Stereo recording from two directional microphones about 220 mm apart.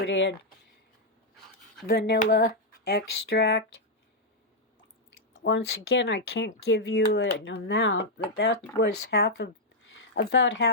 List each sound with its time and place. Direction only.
0.0 s speech: 50° left (ahead or behind)
1.9 s speech: 45° left (ahead or behind)
5.3 s speech: 55° left (ahead or behind)